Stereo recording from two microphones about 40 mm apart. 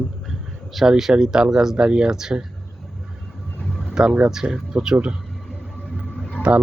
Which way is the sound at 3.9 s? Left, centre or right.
Centre.